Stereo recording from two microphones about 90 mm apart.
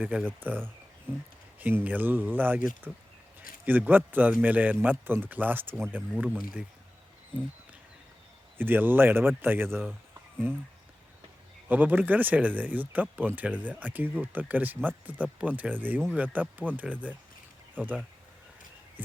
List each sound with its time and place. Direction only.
0.0 s speech: 15° right (ahead or behind)
8.5 s speech: 25° right (ahead or behind)
11.7 s speech: 20° right (ahead or behind)